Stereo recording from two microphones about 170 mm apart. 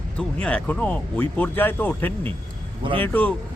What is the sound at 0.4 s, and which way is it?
Speech, 5° left (ahead or behind).